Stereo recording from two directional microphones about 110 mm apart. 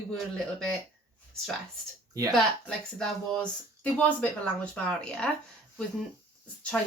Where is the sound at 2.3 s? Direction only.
5° left (ahead or behind).